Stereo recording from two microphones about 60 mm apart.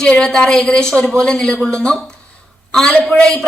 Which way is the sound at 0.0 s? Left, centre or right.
Centre.